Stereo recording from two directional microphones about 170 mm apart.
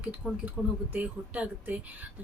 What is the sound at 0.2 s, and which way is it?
A woman's voice, 5° right (ahead or behind).